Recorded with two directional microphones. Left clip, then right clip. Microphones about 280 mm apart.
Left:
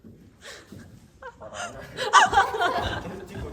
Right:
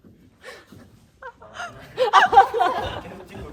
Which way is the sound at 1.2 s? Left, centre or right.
Centre.